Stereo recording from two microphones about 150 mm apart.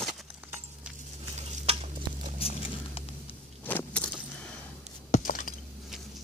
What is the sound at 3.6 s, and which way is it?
Keys jangling, 10° left (ahead or behind).